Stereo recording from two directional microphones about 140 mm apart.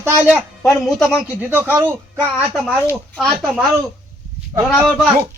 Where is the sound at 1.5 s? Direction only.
15° right (ahead or behind).